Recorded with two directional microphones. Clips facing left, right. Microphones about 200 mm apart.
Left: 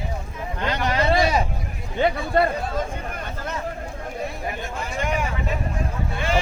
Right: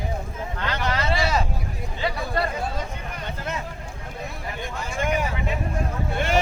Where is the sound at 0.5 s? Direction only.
15° left (ahead or behind).